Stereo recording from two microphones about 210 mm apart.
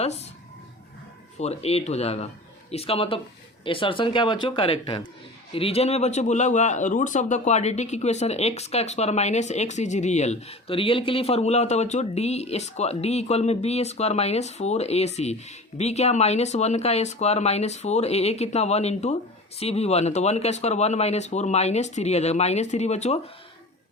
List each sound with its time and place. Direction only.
0.0 s speech: 30° left (ahead or behind)
1.4 s speech: 30° left (ahead or behind)